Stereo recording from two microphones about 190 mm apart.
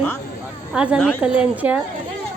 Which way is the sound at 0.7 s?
5° right (ahead or behind).